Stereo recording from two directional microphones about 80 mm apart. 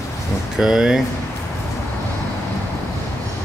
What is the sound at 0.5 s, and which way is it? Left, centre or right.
Speech, centre.